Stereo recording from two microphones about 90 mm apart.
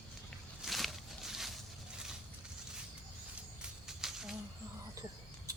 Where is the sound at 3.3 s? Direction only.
5° right (ahead or behind).